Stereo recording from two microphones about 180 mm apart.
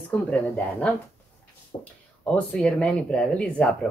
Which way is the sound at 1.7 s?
25° left (ahead or behind).